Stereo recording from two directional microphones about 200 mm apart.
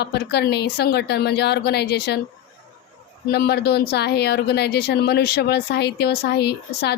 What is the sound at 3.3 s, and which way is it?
Speech, 50° left (ahead or behind).